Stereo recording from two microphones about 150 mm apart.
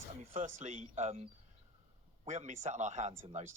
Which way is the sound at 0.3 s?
55° right (ahead or behind).